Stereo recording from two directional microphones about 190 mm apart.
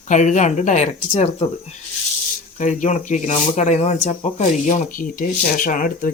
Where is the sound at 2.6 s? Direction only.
40° left (ahead or behind).